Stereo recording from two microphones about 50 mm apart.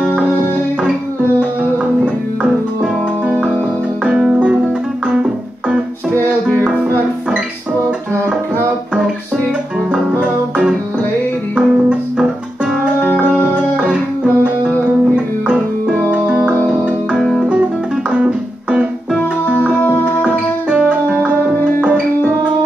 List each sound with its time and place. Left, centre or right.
5.0 s music: centre
11.5 s music: right
16.1 s keyboard: right
17.2 s music: centre
18.1 s music: centre
19.6 s music: left
20.2 s music: right